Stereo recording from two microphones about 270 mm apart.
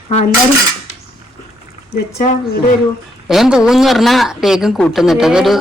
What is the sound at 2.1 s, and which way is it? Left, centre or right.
Speech, left.